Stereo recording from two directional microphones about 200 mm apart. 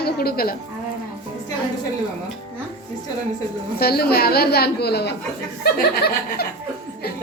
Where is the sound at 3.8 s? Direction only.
50° left (ahead or behind).